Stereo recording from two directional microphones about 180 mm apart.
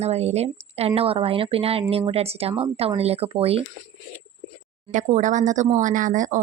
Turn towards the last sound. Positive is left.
turn(degrees=-45)  # may be behind; listen again after turning